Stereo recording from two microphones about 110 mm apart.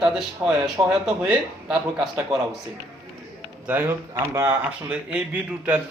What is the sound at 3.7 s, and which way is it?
Speech, 20° right (ahead or behind).